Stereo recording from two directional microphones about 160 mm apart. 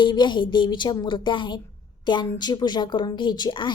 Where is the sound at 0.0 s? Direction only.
30° left (ahead or behind).